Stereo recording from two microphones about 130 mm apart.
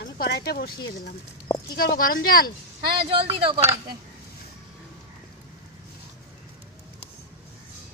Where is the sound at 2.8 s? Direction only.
40° right (ahead or behind).